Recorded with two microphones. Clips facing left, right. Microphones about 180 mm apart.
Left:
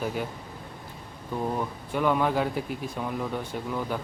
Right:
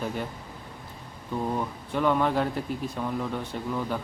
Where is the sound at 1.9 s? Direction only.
5° left (ahead or behind).